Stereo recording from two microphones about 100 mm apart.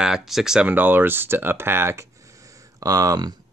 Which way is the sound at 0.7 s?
20° right (ahead or behind).